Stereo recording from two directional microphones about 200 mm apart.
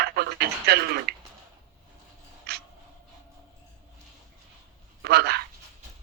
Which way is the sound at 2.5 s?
50° right (ahead or behind).